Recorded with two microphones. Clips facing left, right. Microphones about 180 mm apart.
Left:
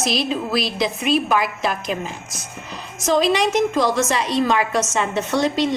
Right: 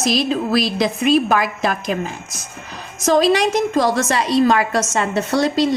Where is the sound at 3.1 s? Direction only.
40° right (ahead or behind).